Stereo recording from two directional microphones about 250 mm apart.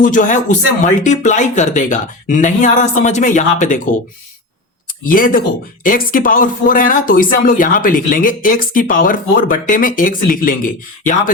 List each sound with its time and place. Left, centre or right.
0.0 s speech: left
5.0 s speech: left